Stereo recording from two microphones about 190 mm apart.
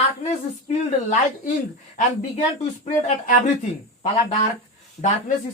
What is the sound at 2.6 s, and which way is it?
Speech, 40° left (ahead or behind).